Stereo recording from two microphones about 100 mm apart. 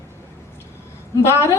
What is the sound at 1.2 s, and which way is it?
Speech, 25° left (ahead or behind).